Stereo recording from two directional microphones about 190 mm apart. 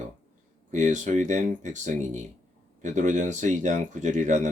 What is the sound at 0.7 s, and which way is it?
Speech, 40° right (ahead or behind).